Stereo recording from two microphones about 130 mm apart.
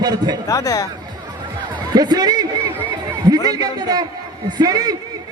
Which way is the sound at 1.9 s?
30° right (ahead or behind).